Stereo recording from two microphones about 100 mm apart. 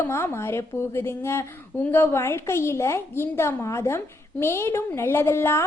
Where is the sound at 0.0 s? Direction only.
25° left (ahead or behind).